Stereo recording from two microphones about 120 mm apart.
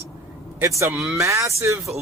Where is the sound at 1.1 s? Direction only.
25° right (ahead or behind).